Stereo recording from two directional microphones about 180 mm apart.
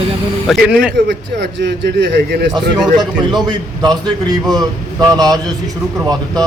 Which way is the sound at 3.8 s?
25° right (ahead or behind).